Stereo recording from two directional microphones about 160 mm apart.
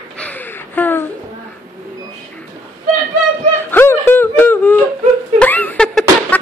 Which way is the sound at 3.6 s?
15° left (ahead or behind).